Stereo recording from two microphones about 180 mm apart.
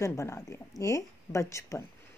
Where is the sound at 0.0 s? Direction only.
15° left (ahead or behind).